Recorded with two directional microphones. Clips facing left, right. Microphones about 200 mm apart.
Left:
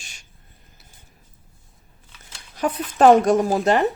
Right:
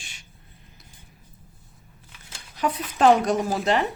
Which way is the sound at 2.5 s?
50° left (ahead or behind).